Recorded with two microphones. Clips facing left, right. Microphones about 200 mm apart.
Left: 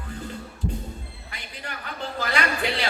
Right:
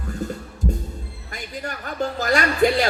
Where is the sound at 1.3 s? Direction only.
45° right (ahead or behind).